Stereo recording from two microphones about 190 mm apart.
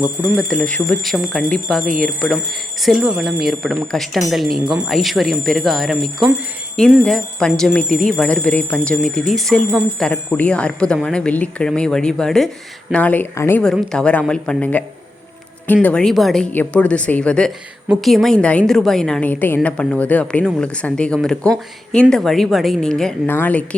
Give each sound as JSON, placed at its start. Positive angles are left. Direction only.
{"t": 0.0, "sound": "a woman's voice", "side_deg": -5}